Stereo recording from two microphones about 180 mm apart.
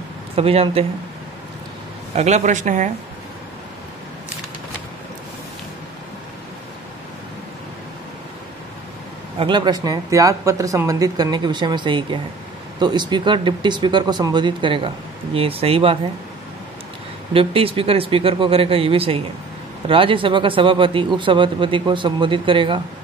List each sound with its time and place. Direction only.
0.4 s speech: 35° right (ahead or behind)
2.1 s speech: 40° right (ahead or behind)
9.4 s speech: 25° right (ahead or behind)
17.3 s speech: 30° right (ahead or behind)